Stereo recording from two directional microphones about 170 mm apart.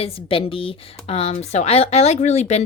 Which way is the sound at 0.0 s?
35° left (ahead or behind).